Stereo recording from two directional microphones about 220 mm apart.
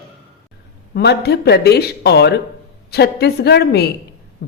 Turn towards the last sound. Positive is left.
turn(degrees=50)  # may be behind; listen again after turning